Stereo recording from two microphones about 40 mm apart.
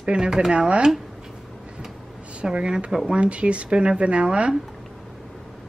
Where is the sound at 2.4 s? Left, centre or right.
Right.